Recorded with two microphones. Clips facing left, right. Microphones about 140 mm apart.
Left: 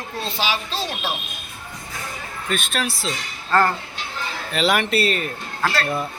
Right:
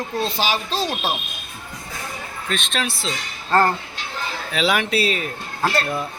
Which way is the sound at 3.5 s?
35° right (ahead or behind).